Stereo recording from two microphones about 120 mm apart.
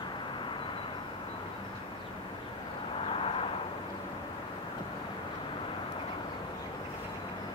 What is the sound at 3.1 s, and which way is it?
Vehicle, 50° left (ahead or behind).